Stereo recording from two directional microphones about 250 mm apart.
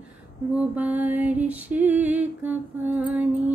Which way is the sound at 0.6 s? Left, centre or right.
Centre.